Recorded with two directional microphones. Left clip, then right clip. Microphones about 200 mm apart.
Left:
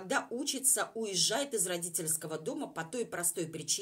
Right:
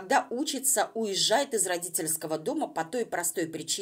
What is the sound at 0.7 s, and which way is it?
A woman's voice, 15° right (ahead or behind).